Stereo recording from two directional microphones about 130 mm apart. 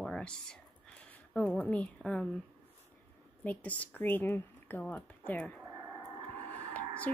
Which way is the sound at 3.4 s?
10° left (ahead or behind).